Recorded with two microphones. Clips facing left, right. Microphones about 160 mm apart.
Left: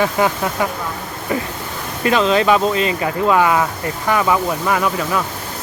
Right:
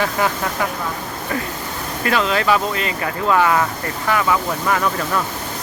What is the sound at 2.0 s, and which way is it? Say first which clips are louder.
Speech: left 4 dB; 20° left (ahead or behind).